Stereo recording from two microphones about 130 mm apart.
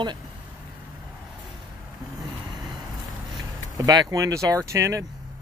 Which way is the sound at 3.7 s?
30° right (ahead or behind).